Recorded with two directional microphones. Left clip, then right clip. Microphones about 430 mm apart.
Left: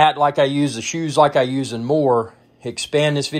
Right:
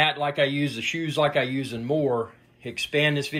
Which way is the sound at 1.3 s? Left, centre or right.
Left.